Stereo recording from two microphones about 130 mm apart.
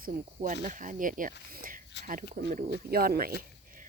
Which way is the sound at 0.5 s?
70° right (ahead or behind).